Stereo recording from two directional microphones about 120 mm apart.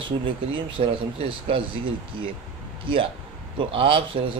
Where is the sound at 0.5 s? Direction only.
45° right (ahead or behind).